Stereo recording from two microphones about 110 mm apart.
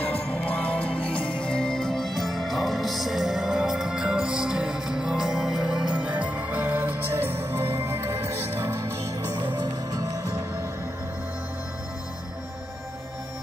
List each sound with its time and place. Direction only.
0.5 s music: 10° left (ahead or behind); by 9.4 s 25° right (ahead or behind)
9.5 s music: 35° right (ahead or behind)